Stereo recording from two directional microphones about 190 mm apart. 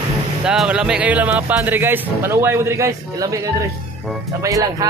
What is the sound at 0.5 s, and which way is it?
Speech, 5° right (ahead or behind).